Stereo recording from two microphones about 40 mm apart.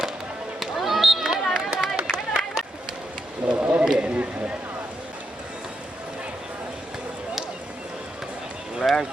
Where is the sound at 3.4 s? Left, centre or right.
Right.